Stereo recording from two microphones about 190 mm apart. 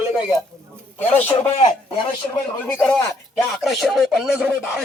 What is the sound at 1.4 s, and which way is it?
Speech, 30° left (ahead or behind).